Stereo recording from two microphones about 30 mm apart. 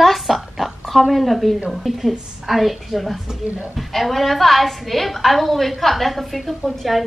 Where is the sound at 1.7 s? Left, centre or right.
Centre.